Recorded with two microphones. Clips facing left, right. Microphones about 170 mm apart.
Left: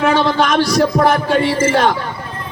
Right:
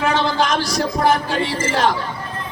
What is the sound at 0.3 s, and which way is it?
A man's voice, 60° left (ahead or behind).